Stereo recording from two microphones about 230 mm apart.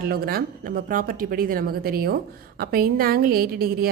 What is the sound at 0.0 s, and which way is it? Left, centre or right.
A woman's voice, right.